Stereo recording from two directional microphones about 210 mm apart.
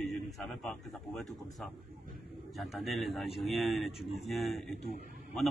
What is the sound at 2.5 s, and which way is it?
A man's voice, centre (ahead or behind).